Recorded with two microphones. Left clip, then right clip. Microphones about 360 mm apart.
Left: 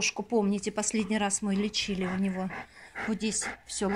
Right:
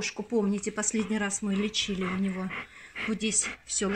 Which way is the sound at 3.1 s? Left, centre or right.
Centre.